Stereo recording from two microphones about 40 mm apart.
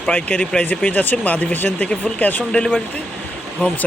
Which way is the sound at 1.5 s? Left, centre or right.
Left.